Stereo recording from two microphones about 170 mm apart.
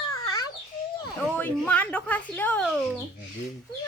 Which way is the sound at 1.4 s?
10° left (ahead or behind).